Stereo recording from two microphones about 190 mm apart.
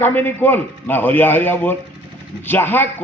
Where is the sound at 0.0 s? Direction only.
10° left (ahead or behind).